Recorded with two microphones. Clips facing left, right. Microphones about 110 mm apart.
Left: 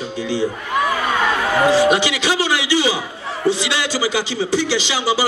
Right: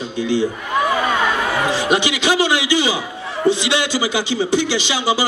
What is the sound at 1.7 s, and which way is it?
A man's voice, 20° right (ahead or behind).